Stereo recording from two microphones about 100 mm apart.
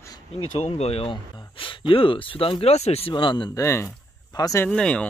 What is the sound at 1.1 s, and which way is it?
Speech, 55° left (ahead or behind).